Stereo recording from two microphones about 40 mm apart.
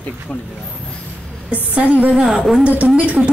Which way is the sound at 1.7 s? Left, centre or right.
Right.